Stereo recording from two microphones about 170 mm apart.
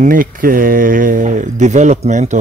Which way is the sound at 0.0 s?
55° right (ahead or behind).